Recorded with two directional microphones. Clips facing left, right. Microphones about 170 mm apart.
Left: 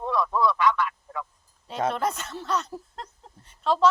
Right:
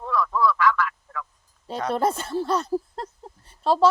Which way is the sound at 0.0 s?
20° left (ahead or behind).